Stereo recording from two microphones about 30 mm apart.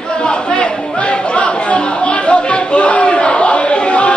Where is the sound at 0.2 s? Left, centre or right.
Left.